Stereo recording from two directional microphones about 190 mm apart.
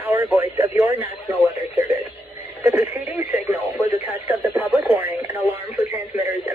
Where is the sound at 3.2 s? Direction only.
30° left (ahead or behind).